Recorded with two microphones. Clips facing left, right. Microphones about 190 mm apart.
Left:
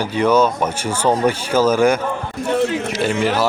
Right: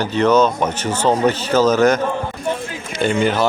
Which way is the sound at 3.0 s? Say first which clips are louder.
Right 3 dB; 5° left (ahead or behind).